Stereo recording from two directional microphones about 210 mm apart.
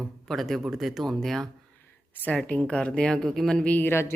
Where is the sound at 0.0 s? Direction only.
Centre (ahead or behind).